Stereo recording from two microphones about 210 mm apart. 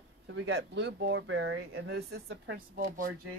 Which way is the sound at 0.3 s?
60° right (ahead or behind).